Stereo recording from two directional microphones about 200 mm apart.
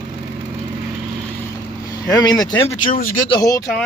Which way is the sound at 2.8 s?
40° left (ahead or behind).